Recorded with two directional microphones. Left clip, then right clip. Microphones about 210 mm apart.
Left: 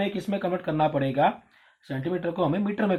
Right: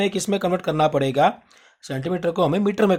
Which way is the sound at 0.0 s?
50° right (ahead or behind).